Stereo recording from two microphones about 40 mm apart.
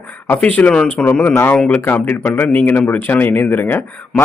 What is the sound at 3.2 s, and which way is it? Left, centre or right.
Speech, left.